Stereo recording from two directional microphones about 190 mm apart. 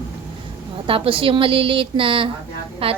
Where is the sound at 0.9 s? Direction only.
30° right (ahead or behind).